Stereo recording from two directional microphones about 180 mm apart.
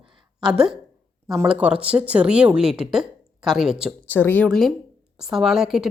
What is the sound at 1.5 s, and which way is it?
Speech, 5° right (ahead or behind).